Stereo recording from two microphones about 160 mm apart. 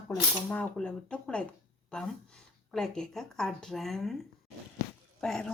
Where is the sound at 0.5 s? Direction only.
5° left (ahead or behind).